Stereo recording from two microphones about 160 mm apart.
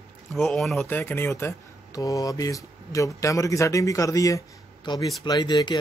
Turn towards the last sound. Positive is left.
turn(degrees=25)  # may be behind; listen again after turning